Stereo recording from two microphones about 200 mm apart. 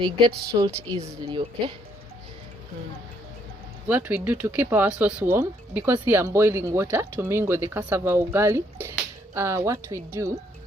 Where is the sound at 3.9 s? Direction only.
10° right (ahead or behind).